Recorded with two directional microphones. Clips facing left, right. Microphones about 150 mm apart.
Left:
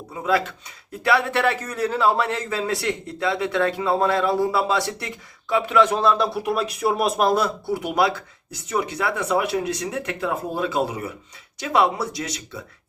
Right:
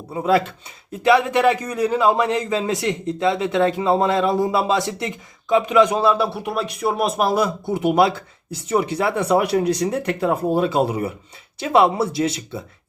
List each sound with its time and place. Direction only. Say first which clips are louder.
0.1 s speech: right 4 dB; 30° right (ahead or behind)
1.0 s a man's voice: right 5 dB; 20° right (ahead or behind)
7.7 s speech: right 6 dB; 25° right (ahead or behind)